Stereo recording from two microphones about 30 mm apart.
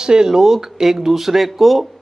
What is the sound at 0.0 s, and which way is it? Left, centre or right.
Speech, right.